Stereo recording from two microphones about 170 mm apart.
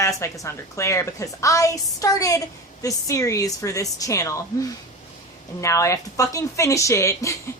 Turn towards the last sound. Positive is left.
turn(degrees=15)  # may be behind; listen again after turning